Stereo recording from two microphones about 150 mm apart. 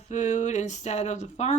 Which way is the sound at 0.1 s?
55° left (ahead or behind).